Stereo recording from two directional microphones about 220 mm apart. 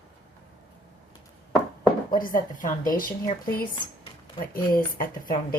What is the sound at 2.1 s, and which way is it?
A woman's voice, 40° left (ahead or behind).